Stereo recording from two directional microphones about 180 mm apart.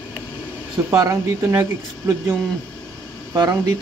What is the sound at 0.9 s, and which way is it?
Speech, 15° right (ahead or behind).